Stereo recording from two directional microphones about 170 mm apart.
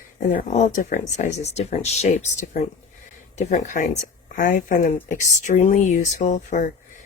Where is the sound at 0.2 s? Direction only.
45° left (ahead or behind).